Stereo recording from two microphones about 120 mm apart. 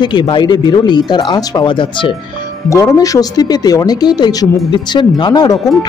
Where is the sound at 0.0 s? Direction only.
40° left (ahead or behind).